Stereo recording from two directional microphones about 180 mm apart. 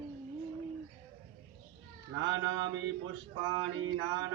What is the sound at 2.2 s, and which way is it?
Mantra, 90° right.